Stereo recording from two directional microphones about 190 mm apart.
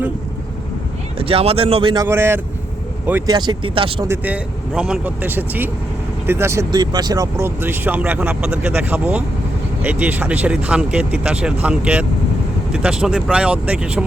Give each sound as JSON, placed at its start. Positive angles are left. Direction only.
{"t": 1.2, "sound": "speech", "side_deg": -30}
{"t": 2.0, "sound": "speech", "side_deg": -10}
{"t": 3.2, "sound": "speech", "side_deg": -20}
{"t": 4.0, "sound": "speech", "side_deg": -10}